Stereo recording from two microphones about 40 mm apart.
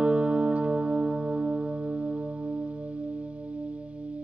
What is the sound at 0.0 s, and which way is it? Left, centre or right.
Music, right.